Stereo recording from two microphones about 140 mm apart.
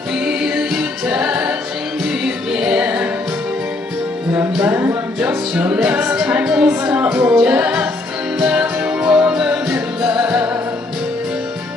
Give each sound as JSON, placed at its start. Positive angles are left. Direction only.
{"t": 0.2, "sound": "a capella", "side_deg": -5}
{"t": 2.2, "sound": "music", "side_deg": -5}
{"t": 4.3, "sound": "music", "side_deg": -15}
{"t": 5.5, "sound": "music", "side_deg": -5}